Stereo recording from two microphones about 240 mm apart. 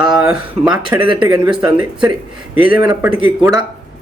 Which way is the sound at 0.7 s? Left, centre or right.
Centre.